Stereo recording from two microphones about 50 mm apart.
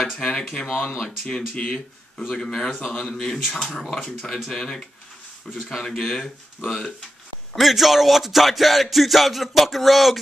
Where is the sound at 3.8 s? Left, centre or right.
Centre.